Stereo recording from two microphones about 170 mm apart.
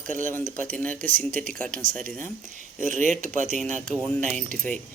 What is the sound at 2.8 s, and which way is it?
Speech, 45° right (ahead or behind).